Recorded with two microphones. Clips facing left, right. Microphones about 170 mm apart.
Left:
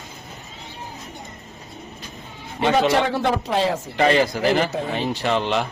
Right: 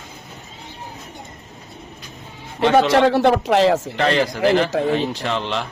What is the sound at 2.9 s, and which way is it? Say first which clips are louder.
Speech: right 5 dB; 80° right.